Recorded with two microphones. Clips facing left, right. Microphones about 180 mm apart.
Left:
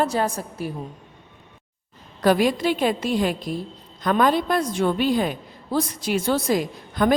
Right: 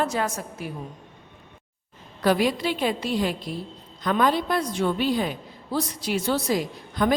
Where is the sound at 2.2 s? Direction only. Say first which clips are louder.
Left 3 dB; 45° left (ahead or behind).